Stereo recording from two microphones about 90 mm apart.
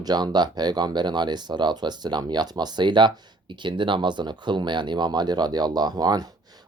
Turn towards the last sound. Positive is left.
turn(degrees=-50)  # may be behind; listen again after turning